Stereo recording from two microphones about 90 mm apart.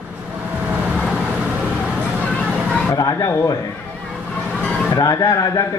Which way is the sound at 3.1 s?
35° left (ahead or behind).